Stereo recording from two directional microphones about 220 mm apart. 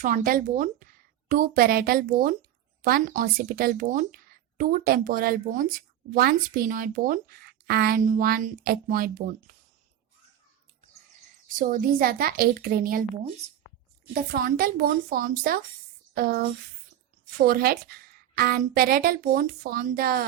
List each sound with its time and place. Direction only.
0.0 s speech: 35° right (ahead or behind)
11.4 s speech: 40° right (ahead or behind)